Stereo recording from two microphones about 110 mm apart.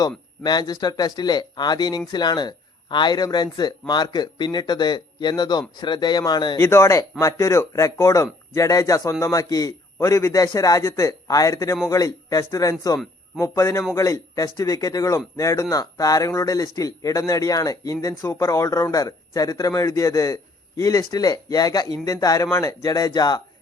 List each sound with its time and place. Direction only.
0.4 s speech: 40° left (ahead or behind)
6.6 s a man's voice: 25° left (ahead or behind)